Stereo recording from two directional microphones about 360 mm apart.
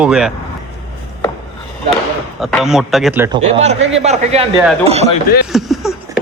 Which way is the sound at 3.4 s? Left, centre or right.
Centre.